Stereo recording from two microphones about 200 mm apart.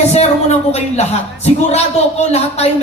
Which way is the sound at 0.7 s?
30° left (ahead or behind).